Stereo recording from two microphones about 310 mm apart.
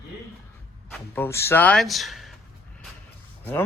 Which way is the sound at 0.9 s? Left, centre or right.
Centre.